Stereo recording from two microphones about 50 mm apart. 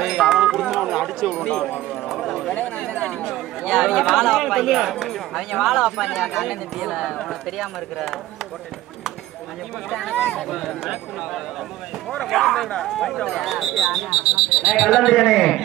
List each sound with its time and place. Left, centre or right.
0.0 s a sound: centre
0.3 s music: centre
1.4 s speech: centre
1.7 s speech: centre
2.9 s speech: left
3.3 s speech: centre
10.5 s speech: centre